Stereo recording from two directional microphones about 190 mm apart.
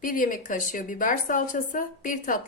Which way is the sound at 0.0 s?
45° left (ahead or behind).